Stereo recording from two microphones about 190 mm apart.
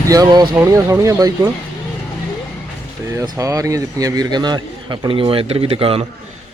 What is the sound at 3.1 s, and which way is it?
A man's voice, 15° right (ahead or behind).